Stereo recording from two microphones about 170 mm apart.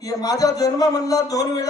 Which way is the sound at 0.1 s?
20° left (ahead or behind).